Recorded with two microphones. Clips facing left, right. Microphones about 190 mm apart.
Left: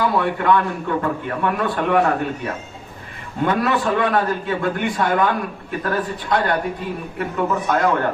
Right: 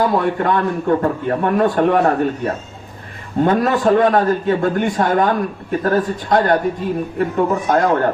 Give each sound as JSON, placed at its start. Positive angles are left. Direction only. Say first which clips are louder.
{"t": 0.0, "sound": "a man's voice", "louder": "right 3 dB", "side_deg": -40}